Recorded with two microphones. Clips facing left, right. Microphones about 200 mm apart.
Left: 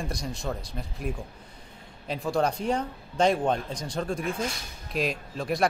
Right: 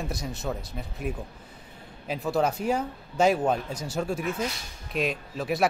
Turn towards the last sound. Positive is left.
turn(degrees=-5)  # may be behind; listen again after turning